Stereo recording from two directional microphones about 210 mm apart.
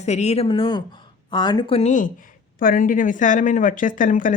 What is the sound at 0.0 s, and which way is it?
A woman's voice, 35° left (ahead or behind).